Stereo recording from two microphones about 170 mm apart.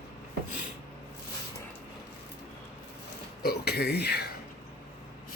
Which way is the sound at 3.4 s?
70° left (ahead or behind).